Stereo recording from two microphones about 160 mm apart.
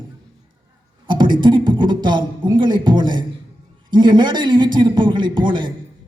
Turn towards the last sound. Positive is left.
turn(degrees=-30)  # may be behind; listen again after turning